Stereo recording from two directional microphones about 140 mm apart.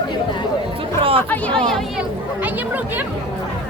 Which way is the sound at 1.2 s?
10° left (ahead or behind).